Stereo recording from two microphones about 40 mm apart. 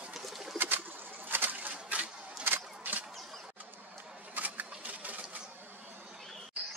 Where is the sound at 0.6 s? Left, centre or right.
Right.